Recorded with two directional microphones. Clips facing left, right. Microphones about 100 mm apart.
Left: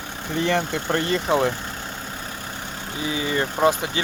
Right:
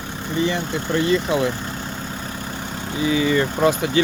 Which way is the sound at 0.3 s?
65° left (ahead or behind).